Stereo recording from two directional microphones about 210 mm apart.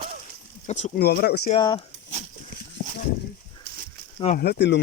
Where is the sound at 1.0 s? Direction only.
50° left (ahead or behind).